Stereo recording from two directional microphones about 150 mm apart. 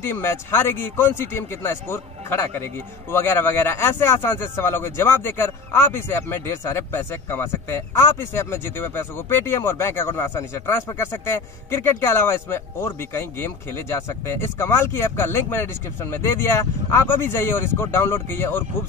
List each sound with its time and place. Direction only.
0.0 s speech: 15° left (ahead or behind)